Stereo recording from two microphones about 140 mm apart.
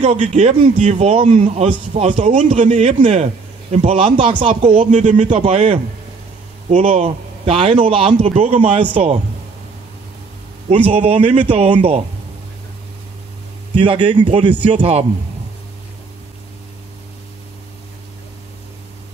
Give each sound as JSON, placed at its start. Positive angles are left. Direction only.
{"t": 0.0, "sound": "a man's voice", "side_deg": -50}
{"t": 4.7, "sound": "speech", "side_deg": -60}
{"t": 5.4, "sound": "a man's voice", "side_deg": -45}
{"t": 8.3, "sound": "a man's voice", "side_deg": -55}
{"t": 10.8, "sound": "a man's voice", "side_deg": -45}
{"t": 13.7, "sound": "a man's voice", "side_deg": -40}